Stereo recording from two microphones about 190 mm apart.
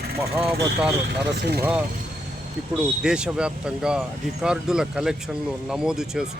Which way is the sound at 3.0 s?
5° right (ahead or behind).